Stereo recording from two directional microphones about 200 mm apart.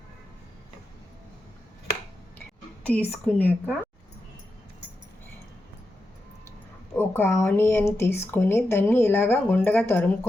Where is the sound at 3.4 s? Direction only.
10° left (ahead or behind).